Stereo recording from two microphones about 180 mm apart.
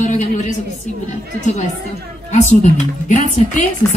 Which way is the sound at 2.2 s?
40° left (ahead or behind).